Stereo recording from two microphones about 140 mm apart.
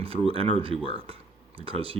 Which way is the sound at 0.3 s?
45° right (ahead or behind).